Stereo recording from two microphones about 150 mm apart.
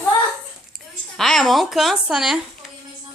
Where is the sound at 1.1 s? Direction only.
5° left (ahead or behind).